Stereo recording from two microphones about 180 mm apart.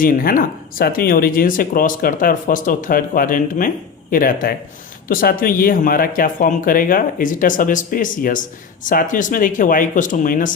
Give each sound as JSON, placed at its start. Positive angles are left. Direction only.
{"t": 0.0, "sound": "speech", "side_deg": 50}